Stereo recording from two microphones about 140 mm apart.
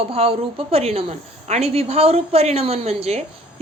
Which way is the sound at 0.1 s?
45° right (ahead or behind).